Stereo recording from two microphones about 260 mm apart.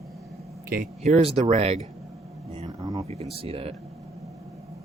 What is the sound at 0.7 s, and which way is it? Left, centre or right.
Speech, right.